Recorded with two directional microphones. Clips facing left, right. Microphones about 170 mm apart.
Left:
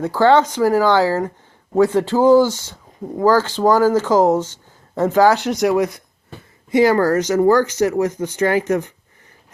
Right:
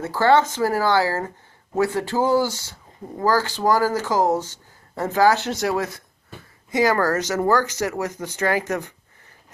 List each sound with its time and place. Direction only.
0.2 s speech: 15° left (ahead or behind)